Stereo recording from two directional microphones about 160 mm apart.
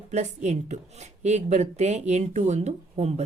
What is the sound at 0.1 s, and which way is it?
Speech, 45° right (ahead or behind).